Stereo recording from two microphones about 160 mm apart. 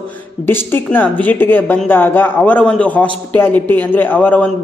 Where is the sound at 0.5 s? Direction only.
15° left (ahead or behind).